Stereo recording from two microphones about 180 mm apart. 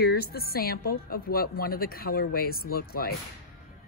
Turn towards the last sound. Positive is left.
turn(degrees=55)  # may be behind; listen again after turning